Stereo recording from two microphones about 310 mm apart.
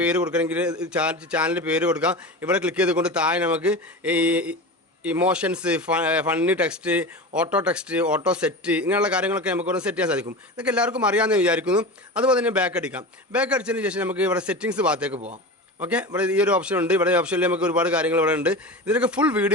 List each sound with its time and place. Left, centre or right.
0.0 s a man's voice: centre
15.1 s a man's voice: right
15.8 s a man's voice: centre